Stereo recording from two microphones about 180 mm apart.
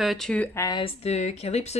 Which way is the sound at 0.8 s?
35° left (ahead or behind).